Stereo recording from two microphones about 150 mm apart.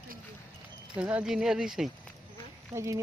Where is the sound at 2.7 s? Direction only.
20° right (ahead or behind).